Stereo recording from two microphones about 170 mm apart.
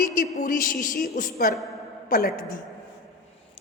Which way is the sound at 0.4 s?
55° left (ahead or behind).